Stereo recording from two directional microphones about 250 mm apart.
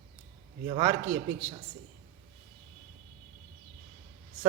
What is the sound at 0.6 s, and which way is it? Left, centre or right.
Speech, right.